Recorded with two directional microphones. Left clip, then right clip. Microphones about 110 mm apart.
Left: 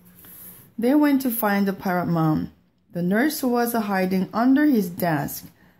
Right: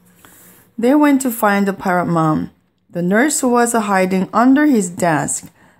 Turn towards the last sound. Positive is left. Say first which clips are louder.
# right 8 dB
turn(degrees=-35)  # may be behind; listen again after turning